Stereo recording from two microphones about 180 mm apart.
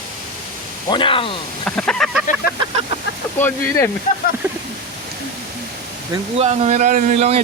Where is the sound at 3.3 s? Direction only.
10° left (ahead or behind).